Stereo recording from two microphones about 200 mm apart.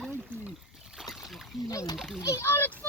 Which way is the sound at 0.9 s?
Centre (ahead or behind).